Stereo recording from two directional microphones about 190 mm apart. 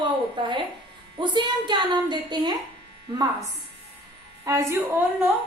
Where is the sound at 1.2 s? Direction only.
25° right (ahead or behind).